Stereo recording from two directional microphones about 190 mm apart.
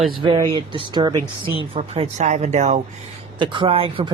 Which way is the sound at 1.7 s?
35° right (ahead or behind).